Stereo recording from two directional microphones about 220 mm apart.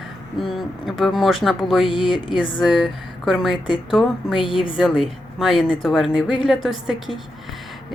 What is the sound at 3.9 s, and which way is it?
A woman's voice, centre (ahead or behind).